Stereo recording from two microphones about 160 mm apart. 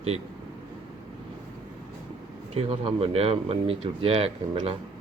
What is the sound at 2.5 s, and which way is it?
Speech, 40° right (ahead or behind).